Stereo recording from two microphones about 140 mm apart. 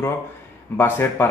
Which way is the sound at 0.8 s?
15° left (ahead or behind).